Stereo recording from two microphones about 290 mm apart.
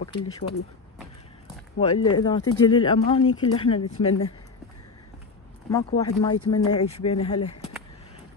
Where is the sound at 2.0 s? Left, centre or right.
Centre.